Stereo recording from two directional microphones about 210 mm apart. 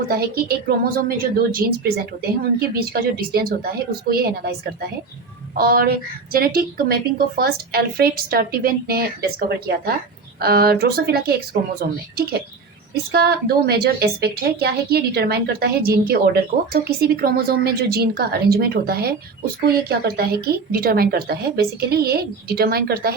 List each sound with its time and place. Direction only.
0.1 s a woman's voice: 45° right (ahead or behind)
5.5 s a woman's voice: 45° right (ahead or behind)
10.4 s a woman's voice: 45° right (ahead or behind)